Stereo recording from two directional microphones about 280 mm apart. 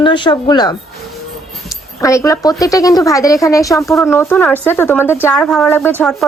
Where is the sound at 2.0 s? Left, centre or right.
Centre.